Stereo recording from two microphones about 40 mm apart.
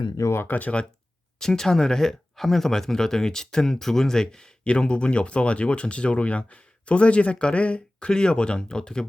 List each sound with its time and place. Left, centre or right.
0.4 s speech: left
1.4 s speech: centre